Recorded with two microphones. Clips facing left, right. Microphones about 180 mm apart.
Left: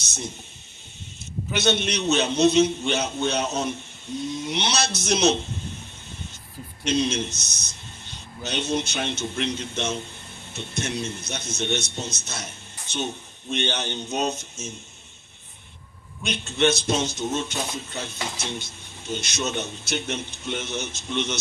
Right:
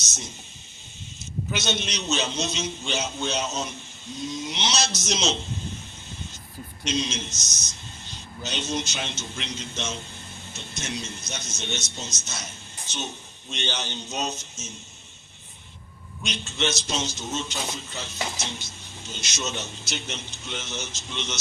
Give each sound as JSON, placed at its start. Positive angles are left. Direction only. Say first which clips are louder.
{"t": 1.5, "sound": "a man's voice", "louder": "left 7 dB", "side_deg": 60}
{"t": 6.8, "sound": "a man's voice", "louder": "left 5 dB", "side_deg": 60}
{"t": 16.2, "sound": "a man's voice", "louder": "left 6 dB", "side_deg": 55}
{"t": 19.1, "sound": "a man's voice", "louder": "left 5 dB", "side_deg": 60}